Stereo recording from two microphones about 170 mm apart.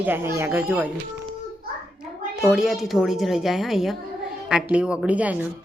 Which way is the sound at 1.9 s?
Centre (ahead or behind).